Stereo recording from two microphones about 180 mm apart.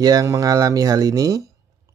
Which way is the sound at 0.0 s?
20° right (ahead or behind).